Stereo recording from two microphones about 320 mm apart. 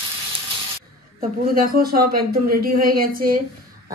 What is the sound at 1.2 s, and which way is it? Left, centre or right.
Speech, right.